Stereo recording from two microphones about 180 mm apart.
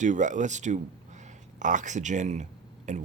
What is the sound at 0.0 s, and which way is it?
Speech, 45° right (ahead or behind).